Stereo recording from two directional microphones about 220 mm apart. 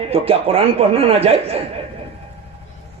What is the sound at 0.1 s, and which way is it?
Speech, 25° right (ahead or behind).